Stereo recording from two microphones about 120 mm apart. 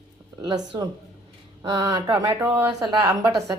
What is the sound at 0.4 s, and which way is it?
A woman's voice, 40° right (ahead or behind).